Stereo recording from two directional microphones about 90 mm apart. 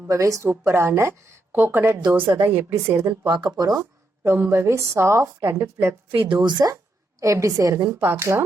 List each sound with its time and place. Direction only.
0.1 s a woman's voice: 35° right (ahead or behind)
3.2 s speech: 60° right (ahead or behind)
3.6 s speech: 35° right (ahead or behind)
6.1 s speech: 65° right (ahead or behind)
7.2 s a woman's voice: 35° right (ahead or behind)
7.9 s speech: 30° right (ahead or behind)